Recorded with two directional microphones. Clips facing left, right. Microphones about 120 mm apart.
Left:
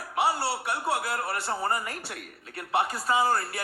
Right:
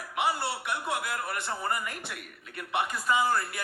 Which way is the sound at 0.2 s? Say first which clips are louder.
Left 3 dB; 35° left (ahead or behind).